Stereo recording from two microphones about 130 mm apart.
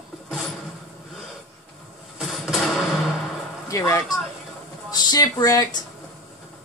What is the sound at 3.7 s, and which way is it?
Speech, 25° left (ahead or behind).